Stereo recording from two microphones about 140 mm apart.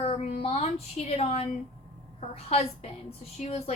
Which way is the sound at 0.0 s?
45° left (ahead or behind).